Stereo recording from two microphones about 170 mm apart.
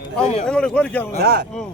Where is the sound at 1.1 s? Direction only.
65° right (ahead or behind).